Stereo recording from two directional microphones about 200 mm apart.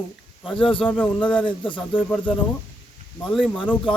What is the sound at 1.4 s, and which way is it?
Speech, 25° left (ahead or behind).